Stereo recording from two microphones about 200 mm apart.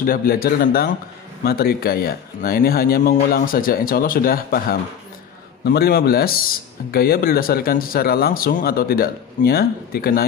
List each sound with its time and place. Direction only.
0.0 s speech: 45° left (ahead or behind)